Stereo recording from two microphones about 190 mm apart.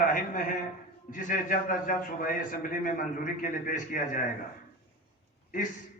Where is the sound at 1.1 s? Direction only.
45° left (ahead or behind).